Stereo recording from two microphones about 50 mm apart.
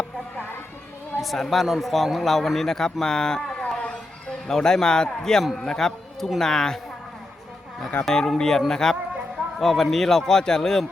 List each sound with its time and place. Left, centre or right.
1.2 s a man's voice: centre
3.8 s a sound: left
4.4 s a man's voice: centre
8.0 s a man's voice: centre